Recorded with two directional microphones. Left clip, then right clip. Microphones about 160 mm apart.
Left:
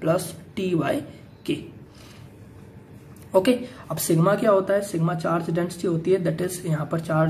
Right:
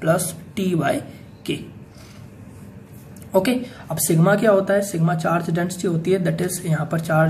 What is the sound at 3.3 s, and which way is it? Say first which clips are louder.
Speech: even; 15° left (ahead or behind).